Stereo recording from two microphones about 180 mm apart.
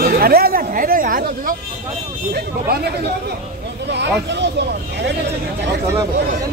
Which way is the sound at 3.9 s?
75° right (ahead or behind).